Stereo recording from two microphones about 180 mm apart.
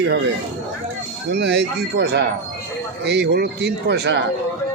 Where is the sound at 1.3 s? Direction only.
65° right (ahead or behind).